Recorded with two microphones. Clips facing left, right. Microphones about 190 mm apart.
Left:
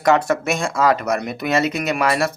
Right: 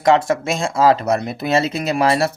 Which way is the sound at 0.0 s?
25° right (ahead or behind).